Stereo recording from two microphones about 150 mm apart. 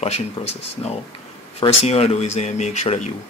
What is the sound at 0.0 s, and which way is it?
Speech, 45° left (ahead or behind).